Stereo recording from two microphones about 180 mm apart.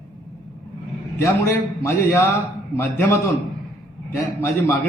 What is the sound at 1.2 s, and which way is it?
A man's voice, 15° left (ahead or behind).